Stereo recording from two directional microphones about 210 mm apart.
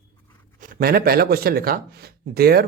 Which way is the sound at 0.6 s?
45° right (ahead or behind).